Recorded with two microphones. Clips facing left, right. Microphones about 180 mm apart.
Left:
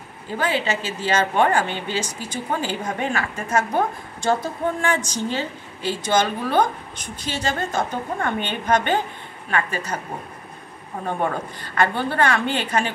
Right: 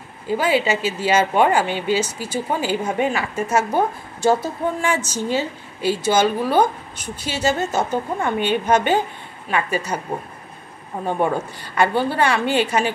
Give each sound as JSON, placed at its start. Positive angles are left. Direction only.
{"t": 0.4, "sound": "speech", "side_deg": -10}
{"t": 11.2, "sound": "speech", "side_deg": -10}